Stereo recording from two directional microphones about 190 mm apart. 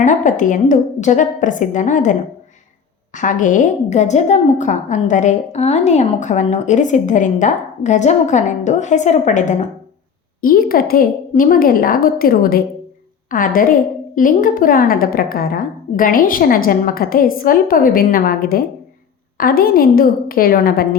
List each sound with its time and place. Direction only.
0.0 s a woman's voice: 40° left (ahead or behind)